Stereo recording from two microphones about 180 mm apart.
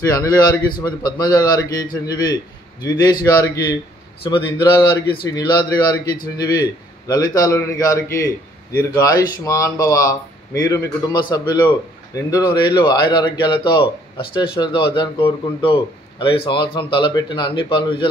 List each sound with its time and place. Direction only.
0.1 s speech: 20° left (ahead or behind)
2.8 s speech: 20° left (ahead or behind)